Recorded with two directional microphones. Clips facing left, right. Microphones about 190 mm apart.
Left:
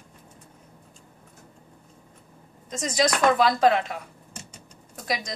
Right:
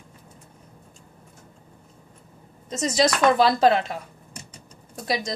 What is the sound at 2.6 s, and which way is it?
Speech, 30° right (ahead or behind).